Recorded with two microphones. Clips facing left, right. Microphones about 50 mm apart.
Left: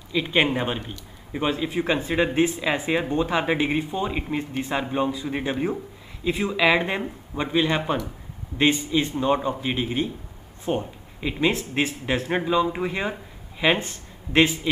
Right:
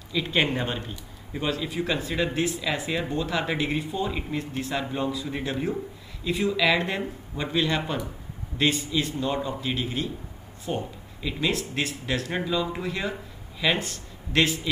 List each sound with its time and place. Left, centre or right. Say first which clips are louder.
0.1 s speech: left 3 dB; centre